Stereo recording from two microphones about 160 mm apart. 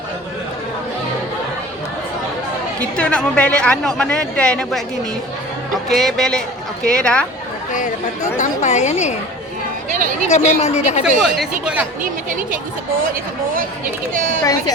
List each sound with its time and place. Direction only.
2.9 s speech: 5° left (ahead or behind)
7.7 s speech: 50° left (ahead or behind)
9.9 s speech: 55° right (ahead or behind)
10.2 s speech: 45° left (ahead or behind)
11.0 s speech: 5° right (ahead or behind)
12.0 s speech: 60° right (ahead or behind)